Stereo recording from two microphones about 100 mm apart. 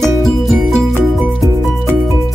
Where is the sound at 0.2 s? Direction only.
Centre (ahead or behind).